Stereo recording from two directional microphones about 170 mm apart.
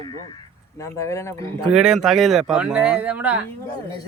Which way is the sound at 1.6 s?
5° right (ahead or behind).